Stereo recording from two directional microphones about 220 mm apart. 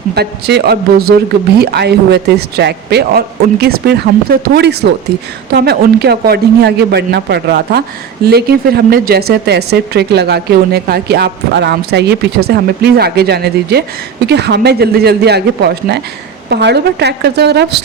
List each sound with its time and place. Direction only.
0.1 s a man's voice: 45° right (ahead or behind)